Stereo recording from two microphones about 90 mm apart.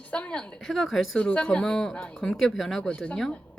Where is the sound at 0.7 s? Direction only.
Centre (ahead or behind).